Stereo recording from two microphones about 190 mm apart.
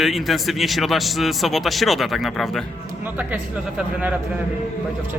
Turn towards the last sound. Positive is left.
turn(degrees=-10)  # may be behind; listen again after turning